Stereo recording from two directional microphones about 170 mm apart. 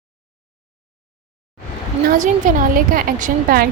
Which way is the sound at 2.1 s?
50° right (ahead or behind).